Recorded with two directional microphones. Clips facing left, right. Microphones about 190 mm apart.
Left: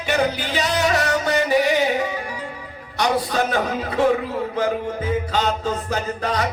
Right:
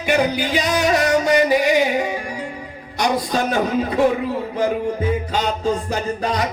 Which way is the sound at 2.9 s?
10° right (ahead or behind).